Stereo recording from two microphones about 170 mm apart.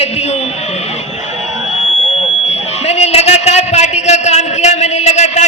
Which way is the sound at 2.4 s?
40° left (ahead or behind).